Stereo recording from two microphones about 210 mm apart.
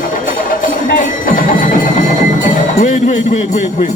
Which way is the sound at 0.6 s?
40° left (ahead or behind).